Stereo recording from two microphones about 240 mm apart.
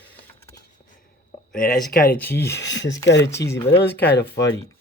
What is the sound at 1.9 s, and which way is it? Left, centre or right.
Speech, left.